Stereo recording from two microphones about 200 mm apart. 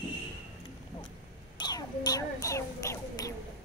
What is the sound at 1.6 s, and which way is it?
Quack, 20° left (ahead or behind).